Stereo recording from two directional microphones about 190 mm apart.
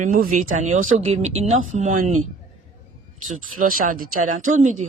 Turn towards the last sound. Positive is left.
turn(degrees=-40)  # may be behind; listen again after turning